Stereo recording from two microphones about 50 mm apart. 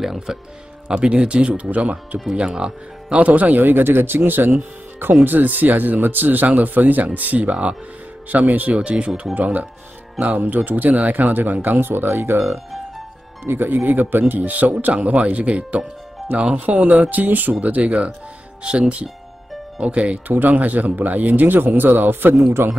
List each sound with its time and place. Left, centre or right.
0.0 s speech: centre
0.8 s speech: centre
2.3 s speech: centre
3.2 s speech: right
8.7 s speech: right
13.5 s speech: right
20.2 s speech: right
22.3 s speech: right